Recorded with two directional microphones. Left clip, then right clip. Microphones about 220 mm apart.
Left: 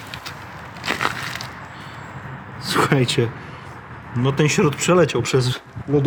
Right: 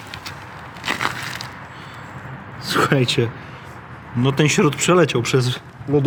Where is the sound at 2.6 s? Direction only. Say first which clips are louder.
Right 1 dB; 5° left (ahead or behind).